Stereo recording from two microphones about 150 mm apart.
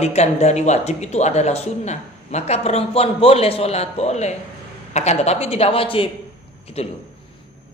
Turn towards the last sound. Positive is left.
turn(degrees=45)  # may be behind; listen again after turning